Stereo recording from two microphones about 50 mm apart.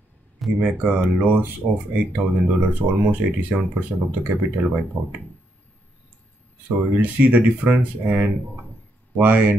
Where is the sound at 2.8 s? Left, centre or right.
Right.